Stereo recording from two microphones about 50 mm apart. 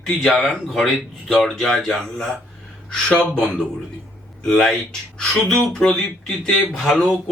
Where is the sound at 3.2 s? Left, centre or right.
Centre.